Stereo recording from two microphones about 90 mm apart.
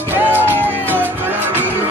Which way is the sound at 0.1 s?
20° right (ahead or behind).